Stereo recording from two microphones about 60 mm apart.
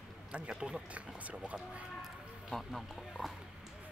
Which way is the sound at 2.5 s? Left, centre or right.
Centre.